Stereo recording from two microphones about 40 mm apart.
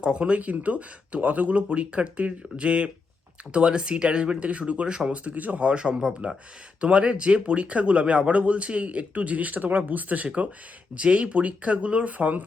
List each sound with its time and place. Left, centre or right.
0.0 s speech: right
5.1 s speech: right
5.6 s speech: right
6.8 s speech: right